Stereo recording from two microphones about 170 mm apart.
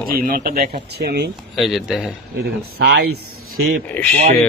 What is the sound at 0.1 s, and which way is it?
Speech, 60° right (ahead or behind).